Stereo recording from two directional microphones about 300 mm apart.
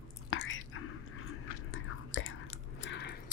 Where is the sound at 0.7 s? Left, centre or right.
Left.